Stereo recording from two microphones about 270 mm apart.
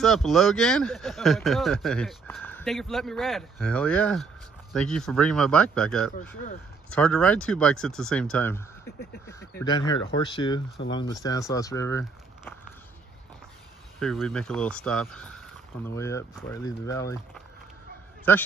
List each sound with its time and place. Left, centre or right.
0.0 s speech: centre
13.9 s speech: centre